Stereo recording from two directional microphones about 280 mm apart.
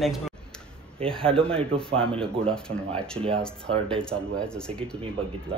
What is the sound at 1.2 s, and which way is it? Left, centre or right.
Speech, centre.